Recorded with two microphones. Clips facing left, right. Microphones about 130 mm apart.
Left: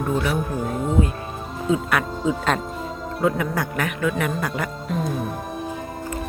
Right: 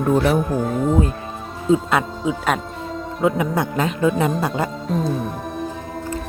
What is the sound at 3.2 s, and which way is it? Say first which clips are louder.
Speech: right 3 dB; 20° right (ahead or behind).